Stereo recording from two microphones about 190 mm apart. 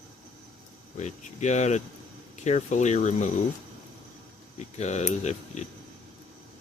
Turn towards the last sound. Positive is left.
turn(degrees=35)  # may be behind; listen again after turning